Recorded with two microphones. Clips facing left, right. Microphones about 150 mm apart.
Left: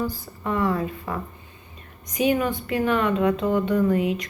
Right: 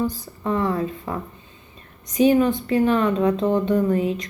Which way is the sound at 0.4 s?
25° right (ahead or behind).